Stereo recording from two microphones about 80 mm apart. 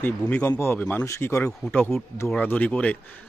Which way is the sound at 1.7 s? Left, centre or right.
Left.